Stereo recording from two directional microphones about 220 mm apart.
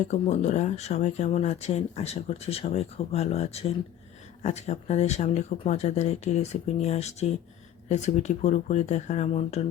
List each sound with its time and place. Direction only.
0.1 s speech: 30° left (ahead or behind)